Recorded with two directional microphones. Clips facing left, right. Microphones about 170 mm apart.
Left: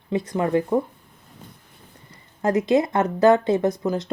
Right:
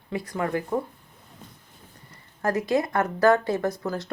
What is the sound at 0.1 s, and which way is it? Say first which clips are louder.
Speech: left 6 dB; 20° left (ahead or behind).